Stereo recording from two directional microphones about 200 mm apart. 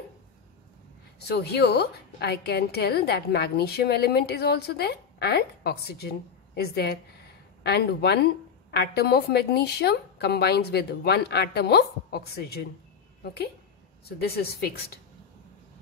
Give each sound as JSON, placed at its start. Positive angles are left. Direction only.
{"t": 1.2, "sound": "a woman's voice", "side_deg": 55}